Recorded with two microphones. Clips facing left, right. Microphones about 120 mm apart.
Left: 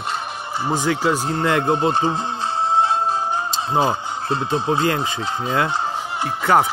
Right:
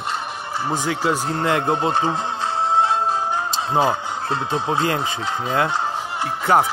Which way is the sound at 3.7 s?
15° left (ahead or behind).